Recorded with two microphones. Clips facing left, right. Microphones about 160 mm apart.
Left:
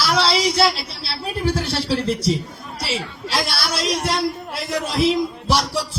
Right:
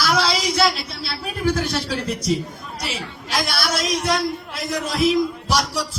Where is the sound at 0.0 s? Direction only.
30° left (ahead or behind).